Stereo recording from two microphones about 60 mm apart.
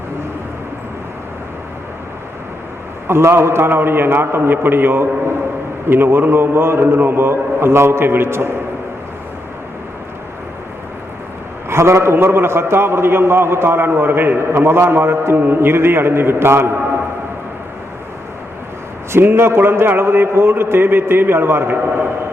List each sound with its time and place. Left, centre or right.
3.1 s a man's voice: right
11.7 s a man's voice: right
19.1 s a man's voice: right